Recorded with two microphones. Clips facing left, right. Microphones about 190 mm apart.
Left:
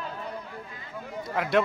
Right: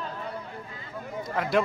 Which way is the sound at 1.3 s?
Centre (ahead or behind).